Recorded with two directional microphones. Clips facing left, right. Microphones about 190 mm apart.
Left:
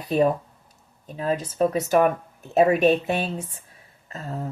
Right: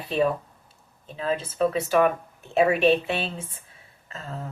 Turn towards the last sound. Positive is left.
turn(degrees=40)  # may be behind; listen again after turning